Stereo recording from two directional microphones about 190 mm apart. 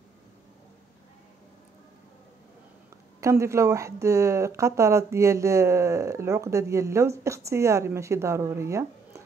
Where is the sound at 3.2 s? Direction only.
15° right (ahead or behind).